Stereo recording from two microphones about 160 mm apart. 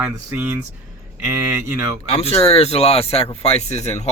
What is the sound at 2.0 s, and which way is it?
Speech, 40° left (ahead or behind).